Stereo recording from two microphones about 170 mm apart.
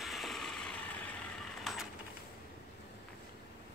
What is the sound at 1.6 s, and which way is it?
Printer, centre (ahead or behind).